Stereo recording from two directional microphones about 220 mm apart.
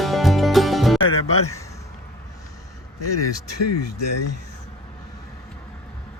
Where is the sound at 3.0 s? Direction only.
90° left.